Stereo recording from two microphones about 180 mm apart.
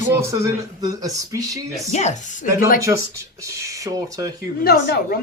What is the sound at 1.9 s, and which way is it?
Speech, 40° left (ahead or behind).